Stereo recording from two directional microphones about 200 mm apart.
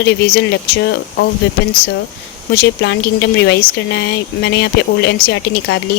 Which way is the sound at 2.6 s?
60° left (ahead or behind).